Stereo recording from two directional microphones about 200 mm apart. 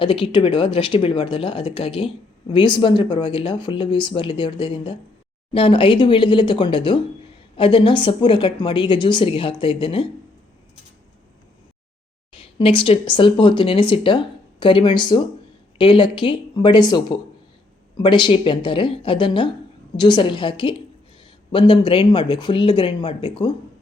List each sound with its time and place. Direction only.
0.0 s speech: 25° left (ahead or behind)
12.3 s speech: 25° left (ahead or behind)